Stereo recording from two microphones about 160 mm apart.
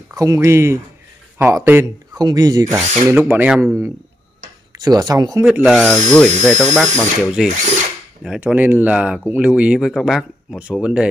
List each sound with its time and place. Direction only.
0.1 s speech: 20° right (ahead or behind)
4.7 s speech: 25° right (ahead or behind)
5.4 s speech: 5° right (ahead or behind)